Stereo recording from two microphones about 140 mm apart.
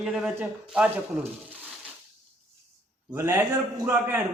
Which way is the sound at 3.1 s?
20° right (ahead or behind).